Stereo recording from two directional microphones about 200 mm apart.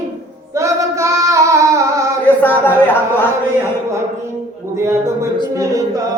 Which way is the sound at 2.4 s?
10° left (ahead or behind).